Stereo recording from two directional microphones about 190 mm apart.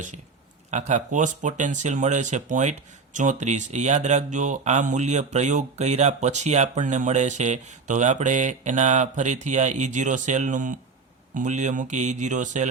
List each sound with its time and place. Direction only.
0.7 s speech: 40° right (ahead or behind)